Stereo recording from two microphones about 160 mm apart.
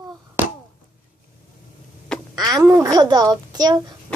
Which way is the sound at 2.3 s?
25° right (ahead or behind).